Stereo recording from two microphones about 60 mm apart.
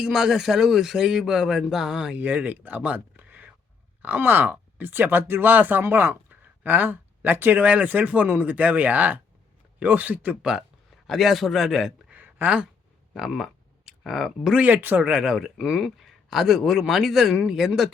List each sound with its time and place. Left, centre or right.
0.0 s speech: centre
2.1 s speech: right
11.0 s a man's voice: centre
12.1 s a sound: right
13.1 s speech: centre
14.6 s speech: right
15.0 s a man's voice: centre